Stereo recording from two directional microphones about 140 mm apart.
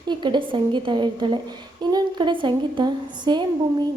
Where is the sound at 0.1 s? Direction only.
35° right (ahead or behind).